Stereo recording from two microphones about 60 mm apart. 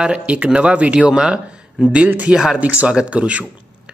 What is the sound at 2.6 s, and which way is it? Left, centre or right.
Speech, right.